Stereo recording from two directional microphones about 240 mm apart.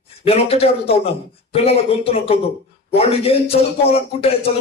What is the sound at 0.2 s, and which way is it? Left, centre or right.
A man's voice, left.